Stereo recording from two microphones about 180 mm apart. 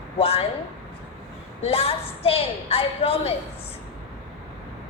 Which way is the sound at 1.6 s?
30° left (ahead or behind).